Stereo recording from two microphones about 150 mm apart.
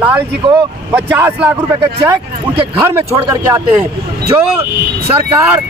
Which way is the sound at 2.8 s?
15° right (ahead or behind).